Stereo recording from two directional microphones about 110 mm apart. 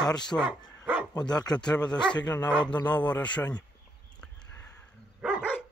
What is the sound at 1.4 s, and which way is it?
Speech, 10° left (ahead or behind).